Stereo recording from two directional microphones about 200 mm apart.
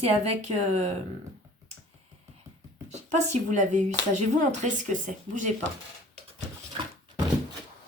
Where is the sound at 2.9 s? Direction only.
35° right (ahead or behind).